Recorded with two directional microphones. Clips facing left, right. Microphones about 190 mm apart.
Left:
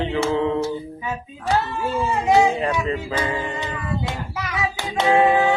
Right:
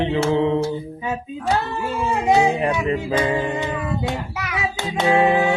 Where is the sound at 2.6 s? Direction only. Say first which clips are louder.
Right 2 dB; 20° right (ahead or behind).